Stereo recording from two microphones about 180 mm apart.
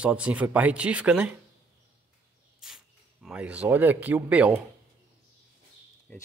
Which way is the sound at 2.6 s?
Centre (ahead or behind).